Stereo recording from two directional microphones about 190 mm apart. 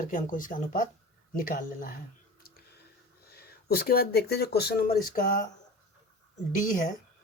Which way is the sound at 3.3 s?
55° left (ahead or behind).